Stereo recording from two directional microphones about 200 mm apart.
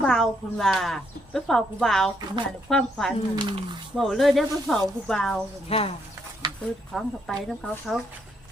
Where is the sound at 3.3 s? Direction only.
25° right (ahead or behind).